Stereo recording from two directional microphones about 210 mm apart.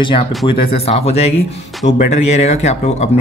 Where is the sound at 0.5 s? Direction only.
30° left (ahead or behind).